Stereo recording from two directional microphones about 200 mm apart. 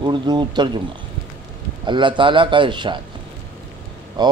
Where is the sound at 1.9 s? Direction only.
25° right (ahead or behind).